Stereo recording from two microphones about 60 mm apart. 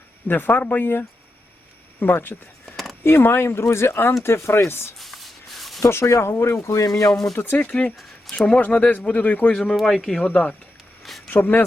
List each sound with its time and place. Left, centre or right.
0.3 s speech: left
4.9 s a sound: centre
5.9 s speech: left
7.1 s speech: centre
7.3 s speech: left
7.7 s speech: left
9.6 s speech: centre
10.2 s speech: left